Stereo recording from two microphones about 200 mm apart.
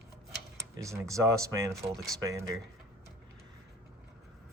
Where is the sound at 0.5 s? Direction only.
15° right (ahead or behind).